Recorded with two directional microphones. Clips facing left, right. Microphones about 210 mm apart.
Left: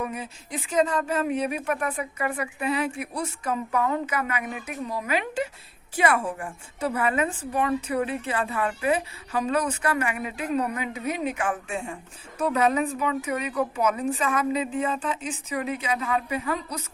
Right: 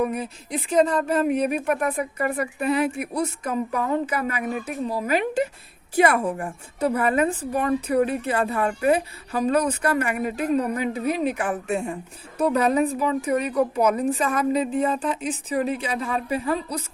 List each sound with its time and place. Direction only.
0.5 s a woman's voice: 35° right (ahead or behind)